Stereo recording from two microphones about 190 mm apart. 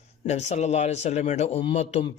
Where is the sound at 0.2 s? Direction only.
35° left (ahead or behind).